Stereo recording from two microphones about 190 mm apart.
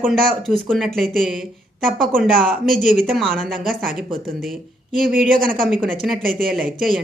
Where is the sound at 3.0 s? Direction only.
Centre (ahead or behind).